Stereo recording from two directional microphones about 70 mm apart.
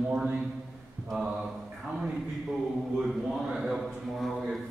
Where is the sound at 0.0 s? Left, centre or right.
Centre.